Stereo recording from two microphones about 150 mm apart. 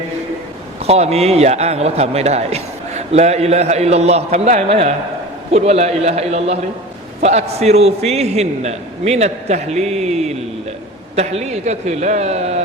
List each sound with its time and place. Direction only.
0.9 s a man's voice: 45° right (ahead or behind)